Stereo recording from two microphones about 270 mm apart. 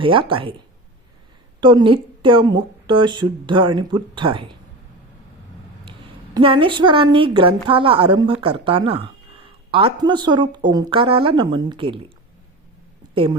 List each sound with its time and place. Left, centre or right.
0.0 s a woman's voice: centre
1.6 s a woman's voice: centre
6.3 s a woman's voice: centre